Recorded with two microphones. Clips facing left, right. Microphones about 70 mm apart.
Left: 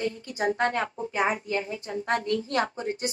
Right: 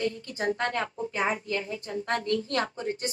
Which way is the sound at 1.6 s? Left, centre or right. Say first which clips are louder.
Left 2 dB; left.